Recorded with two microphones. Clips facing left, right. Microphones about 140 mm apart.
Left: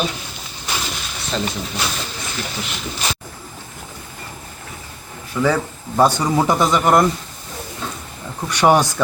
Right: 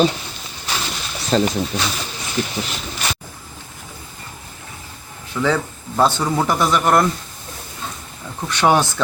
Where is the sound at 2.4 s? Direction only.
15° right (ahead or behind).